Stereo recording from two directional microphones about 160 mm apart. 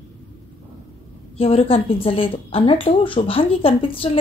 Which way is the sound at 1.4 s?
35° left (ahead or behind).